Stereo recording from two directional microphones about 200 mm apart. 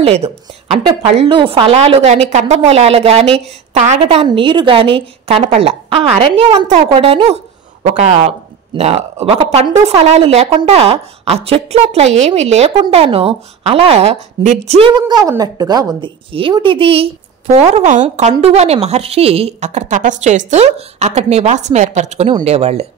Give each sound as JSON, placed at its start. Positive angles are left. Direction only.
{"t": 0.0, "sound": "a woman's voice", "side_deg": -30}
{"t": 15.0, "sound": "a woman's voice", "side_deg": -20}